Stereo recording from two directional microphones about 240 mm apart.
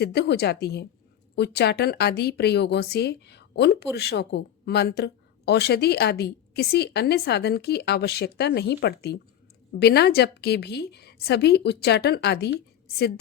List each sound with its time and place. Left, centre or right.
0.0 s speech: left